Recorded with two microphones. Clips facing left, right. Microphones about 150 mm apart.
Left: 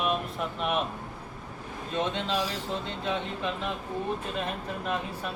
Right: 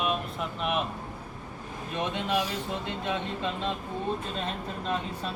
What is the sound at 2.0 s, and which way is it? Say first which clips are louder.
Speech: even; 10° right (ahead or behind).